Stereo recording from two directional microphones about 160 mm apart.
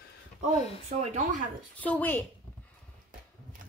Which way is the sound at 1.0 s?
50° right (ahead or behind).